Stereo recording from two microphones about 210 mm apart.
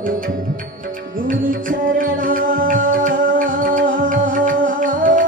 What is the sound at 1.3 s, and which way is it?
Music, 40° right (ahead or behind).